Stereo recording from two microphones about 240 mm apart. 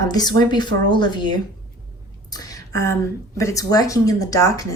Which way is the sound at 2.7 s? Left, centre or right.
Centre.